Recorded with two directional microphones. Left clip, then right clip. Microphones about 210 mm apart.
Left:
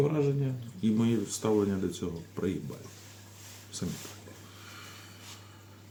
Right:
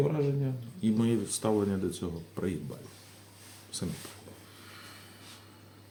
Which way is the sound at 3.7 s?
15° right (ahead or behind).